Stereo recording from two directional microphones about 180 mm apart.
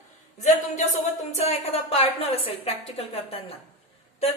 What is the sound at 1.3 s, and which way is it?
A woman's voice, 35° left (ahead or behind).